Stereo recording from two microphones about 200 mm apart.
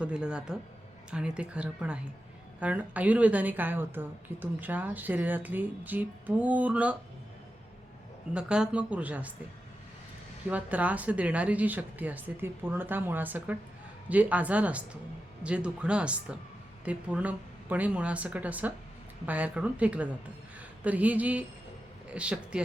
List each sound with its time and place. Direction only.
0.0 s a woman's voice: 5° right (ahead or behind)
8.3 s a woman's voice: 5° right (ahead or behind)
10.5 s a woman's voice: 5° right (ahead or behind)